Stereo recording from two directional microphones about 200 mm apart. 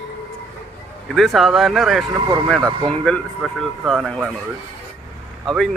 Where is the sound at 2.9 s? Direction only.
5° left (ahead or behind).